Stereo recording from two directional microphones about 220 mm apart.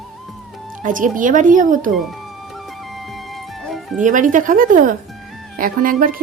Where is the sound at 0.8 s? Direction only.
35° right (ahead or behind).